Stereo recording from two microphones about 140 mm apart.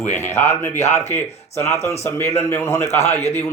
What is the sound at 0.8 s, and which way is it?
Speech, 50° left (ahead or behind).